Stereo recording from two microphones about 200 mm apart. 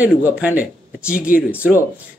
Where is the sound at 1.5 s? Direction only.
10° left (ahead or behind).